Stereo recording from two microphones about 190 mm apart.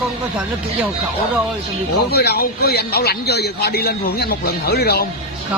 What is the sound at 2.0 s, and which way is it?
Speech, 55° left (ahead or behind).